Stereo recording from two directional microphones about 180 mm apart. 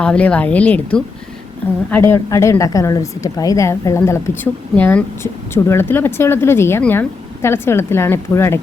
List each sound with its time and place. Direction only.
0.0 s a woman's voice: 5° left (ahead or behind)